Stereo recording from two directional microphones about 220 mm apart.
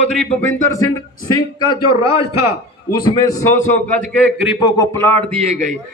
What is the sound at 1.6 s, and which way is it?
Speech, 20° left (ahead or behind).